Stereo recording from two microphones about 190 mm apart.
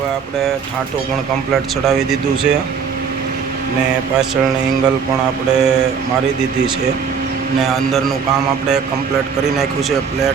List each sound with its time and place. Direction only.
1.9 s speech: centre (ahead or behind)
5.5 s speech: 5° right (ahead or behind)
7.6 s speech: centre (ahead or behind)